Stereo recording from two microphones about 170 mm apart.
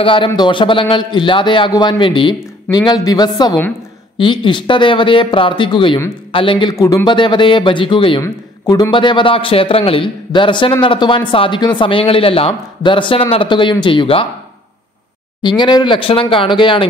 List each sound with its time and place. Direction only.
0.0 s a man's voice: 30° left (ahead or behind)
8.2 s a man's voice: 20° left (ahead or behind)
15.4 s a man's voice: 25° left (ahead or behind)